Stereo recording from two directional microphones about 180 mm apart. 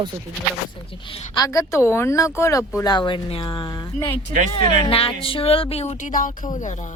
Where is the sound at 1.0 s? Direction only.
30° left (ahead or behind).